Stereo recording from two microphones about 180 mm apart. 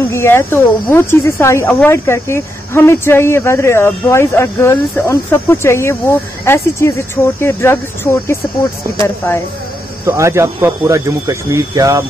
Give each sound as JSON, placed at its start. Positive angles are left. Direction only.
{"t": 0.1, "sound": "speech", "side_deg": 15}
{"t": 10.0, "sound": "speech", "side_deg": -15}